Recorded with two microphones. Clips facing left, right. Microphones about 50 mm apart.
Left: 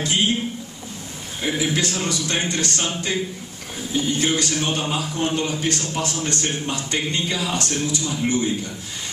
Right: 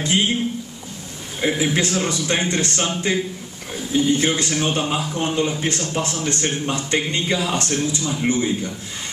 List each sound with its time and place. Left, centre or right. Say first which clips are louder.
1.4 s a man's voice: right 3 dB; right